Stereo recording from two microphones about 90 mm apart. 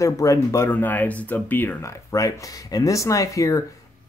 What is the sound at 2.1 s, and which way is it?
Speech, 40° left (ahead or behind).